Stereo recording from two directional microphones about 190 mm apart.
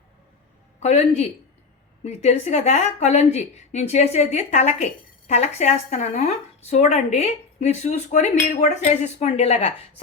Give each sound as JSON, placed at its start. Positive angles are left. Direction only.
{"t": 0.8, "sound": "speech", "side_deg": 35}